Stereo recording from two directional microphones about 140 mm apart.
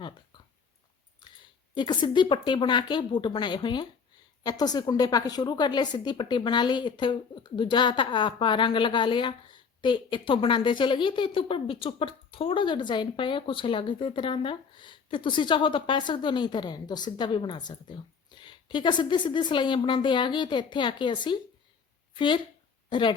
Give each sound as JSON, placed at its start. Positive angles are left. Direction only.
{"t": 1.7, "sound": "a woman's voice", "side_deg": 35}